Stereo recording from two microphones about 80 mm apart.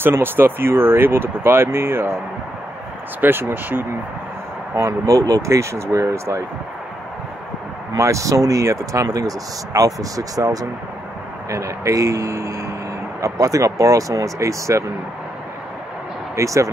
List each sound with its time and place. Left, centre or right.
0.0 s speech: right
3.2 s speech: right
4.7 s speech: right
7.9 s speech: right
16.3 s speech: right